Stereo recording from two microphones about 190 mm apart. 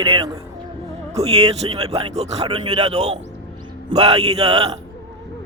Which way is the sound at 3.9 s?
35° right (ahead or behind).